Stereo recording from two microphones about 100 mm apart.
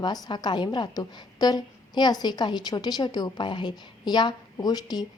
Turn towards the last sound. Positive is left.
turn(degrees=40)  # may be behind; listen again after turning